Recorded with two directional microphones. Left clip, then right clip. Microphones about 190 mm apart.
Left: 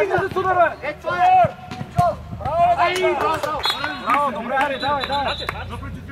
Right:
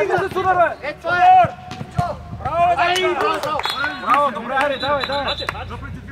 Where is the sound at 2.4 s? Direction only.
25° right (ahead or behind).